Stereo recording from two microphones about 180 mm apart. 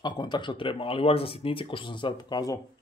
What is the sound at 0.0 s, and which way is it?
Speech, 25° left (ahead or behind).